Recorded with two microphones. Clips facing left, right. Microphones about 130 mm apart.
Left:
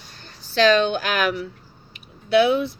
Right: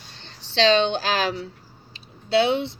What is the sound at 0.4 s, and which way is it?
Speech, 25° right (ahead or behind).